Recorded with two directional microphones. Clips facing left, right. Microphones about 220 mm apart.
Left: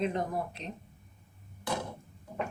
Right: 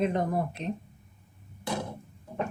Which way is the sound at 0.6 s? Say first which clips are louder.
Right 8 dB; 55° right (ahead or behind).